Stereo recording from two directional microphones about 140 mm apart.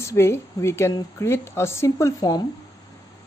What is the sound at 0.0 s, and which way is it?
A woman's voice, 20° left (ahead or behind).